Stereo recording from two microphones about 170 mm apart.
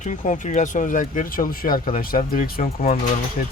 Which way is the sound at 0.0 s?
45° left (ahead or behind).